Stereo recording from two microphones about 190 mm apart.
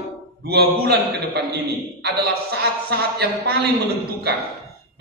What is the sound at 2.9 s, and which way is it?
Speech, 55° right (ahead or behind).